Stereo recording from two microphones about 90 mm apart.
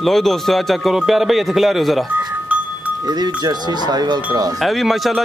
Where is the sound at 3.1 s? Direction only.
50° right (ahead or behind).